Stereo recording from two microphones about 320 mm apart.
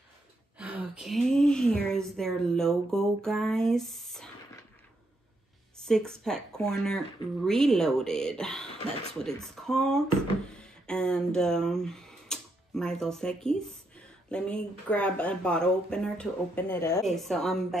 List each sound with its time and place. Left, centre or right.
0.6 s a woman's voice: centre
5.9 s a woman's voice: centre